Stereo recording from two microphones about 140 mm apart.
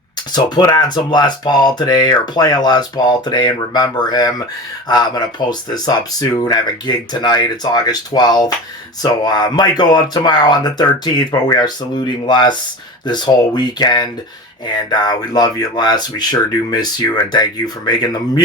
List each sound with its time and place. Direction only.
0.3 s speech: 30° left (ahead or behind)